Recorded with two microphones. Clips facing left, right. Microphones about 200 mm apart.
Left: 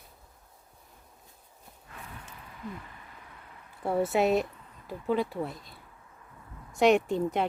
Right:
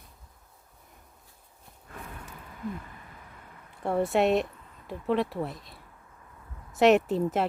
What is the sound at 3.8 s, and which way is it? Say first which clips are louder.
Speech: right 1 dB; centre (ahead or behind).